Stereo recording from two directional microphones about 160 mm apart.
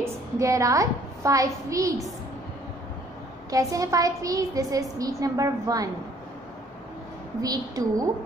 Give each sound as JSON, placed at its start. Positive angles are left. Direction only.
{"t": 0.0, "sound": "a woman's voice", "side_deg": -20}
{"t": 3.4, "sound": "a woman's voice", "side_deg": -20}
{"t": 7.4, "sound": "a woman's voice", "side_deg": -25}